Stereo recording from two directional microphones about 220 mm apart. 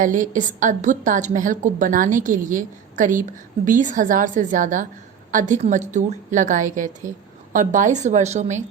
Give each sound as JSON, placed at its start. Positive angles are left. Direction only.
{"t": 0.0, "sound": "a woman's voice", "side_deg": -35}